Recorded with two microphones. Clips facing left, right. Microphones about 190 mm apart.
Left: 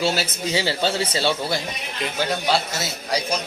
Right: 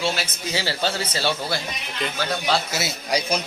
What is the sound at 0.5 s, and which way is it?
Speech, 20° left (ahead or behind).